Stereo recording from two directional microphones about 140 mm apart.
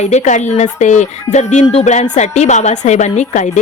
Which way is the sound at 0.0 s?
55° left (ahead or behind).